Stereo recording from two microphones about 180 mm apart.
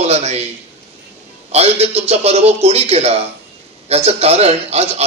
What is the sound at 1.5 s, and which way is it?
A man's voice, 35° right (ahead or behind).